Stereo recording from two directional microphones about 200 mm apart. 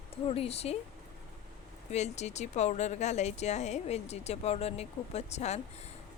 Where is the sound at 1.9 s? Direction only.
35° left (ahead or behind).